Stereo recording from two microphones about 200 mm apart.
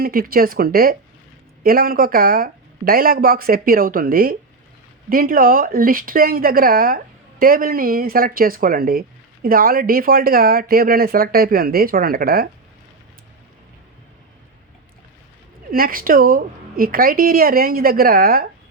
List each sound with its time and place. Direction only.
0.0 s speech: 45° right (ahead or behind)
15.7 s speech: 45° right (ahead or behind)